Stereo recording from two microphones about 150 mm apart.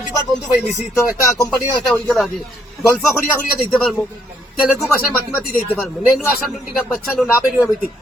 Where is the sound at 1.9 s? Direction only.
Centre (ahead or behind).